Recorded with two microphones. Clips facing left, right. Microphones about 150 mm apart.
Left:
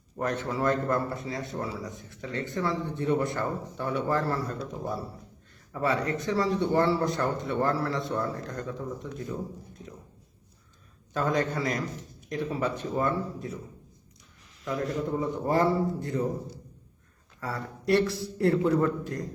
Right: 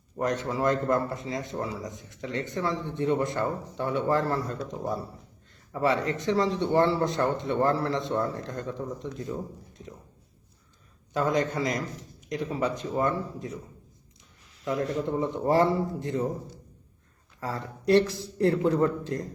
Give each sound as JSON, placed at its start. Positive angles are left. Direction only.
{"t": 0.2, "sound": "speech", "side_deg": -15}
{"t": 11.1, "sound": "speech", "side_deg": -15}
{"t": 14.6, "sound": "speech", "side_deg": -30}
{"t": 17.4, "sound": "speech", "side_deg": -20}